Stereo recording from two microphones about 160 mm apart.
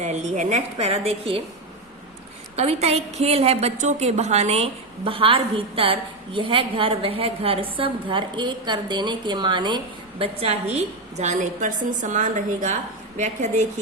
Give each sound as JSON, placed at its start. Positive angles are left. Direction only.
{"t": 0.0, "sound": "a woman's voice", "side_deg": -45}
{"t": 2.6, "sound": "a woman's voice", "side_deg": -40}